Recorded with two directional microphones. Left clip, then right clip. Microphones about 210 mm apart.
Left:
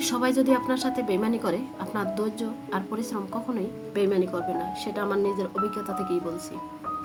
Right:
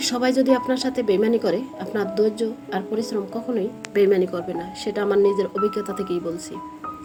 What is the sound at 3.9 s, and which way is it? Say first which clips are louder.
Speech: right 6 dB; 20° right (ahead or behind).